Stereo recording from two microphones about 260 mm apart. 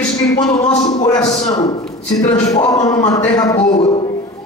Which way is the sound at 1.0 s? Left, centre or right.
Centre.